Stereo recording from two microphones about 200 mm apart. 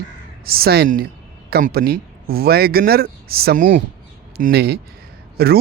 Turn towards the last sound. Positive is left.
turn(degrees=-50)  # may be behind; listen again after turning